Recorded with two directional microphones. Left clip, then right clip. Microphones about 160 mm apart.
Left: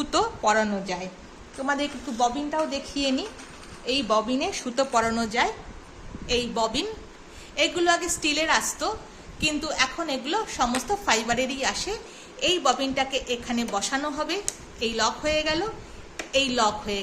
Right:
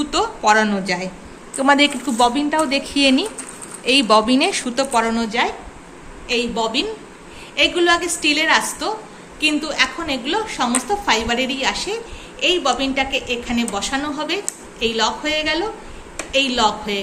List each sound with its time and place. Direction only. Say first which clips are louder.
0.4 s speech: right 7 dB; 15° left (ahead or behind)
1.5 s a woman's voice: right 12 dB; 15° right (ahead or behind); by 4.7 s 5° left (ahead or behind)
4.7 s a woman's voice: right 5 dB; 20° left (ahead or behind)
6.2 s a woman's voice: right 5 dB; 45° left (ahead or behind)
7.5 s a woman's voice: right 7 dB; 30° left (ahead or behind)